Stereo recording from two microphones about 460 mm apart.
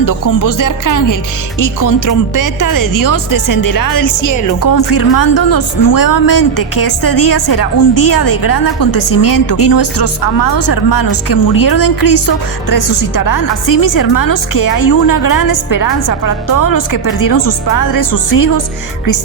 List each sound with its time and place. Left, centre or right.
0.0 s a woman's voice: left